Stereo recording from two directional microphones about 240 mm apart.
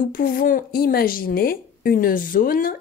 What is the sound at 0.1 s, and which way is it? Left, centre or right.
A woman's voice, left.